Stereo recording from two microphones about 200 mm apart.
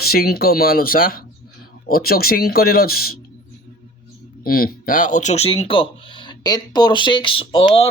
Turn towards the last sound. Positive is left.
turn(degrees=25)  # may be behind; listen again after turning